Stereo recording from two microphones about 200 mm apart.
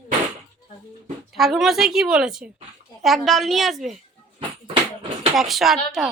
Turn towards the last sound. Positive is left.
turn(degrees=0)  # may be behind; listen again after turning